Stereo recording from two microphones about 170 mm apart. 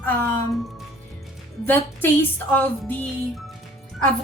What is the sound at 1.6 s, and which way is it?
A woman's voice, 10° left (ahead or behind).